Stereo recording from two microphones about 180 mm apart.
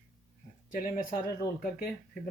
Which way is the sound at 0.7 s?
50° left (ahead or behind).